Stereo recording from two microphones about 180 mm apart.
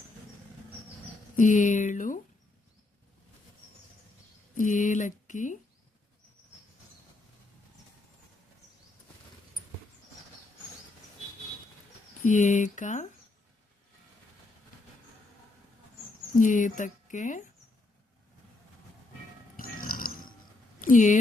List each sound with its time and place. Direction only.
1.4 s a woman's voice: 45° left (ahead or behind)
4.5 s a sound: 45° left (ahead or behind)
12.2 s a woman's voice: 45° left (ahead or behind)
16.4 s a woman's voice: 45° left (ahead or behind)
19.5 s pig: 50° left (ahead or behind)
20.8 s speech: 45° left (ahead or behind)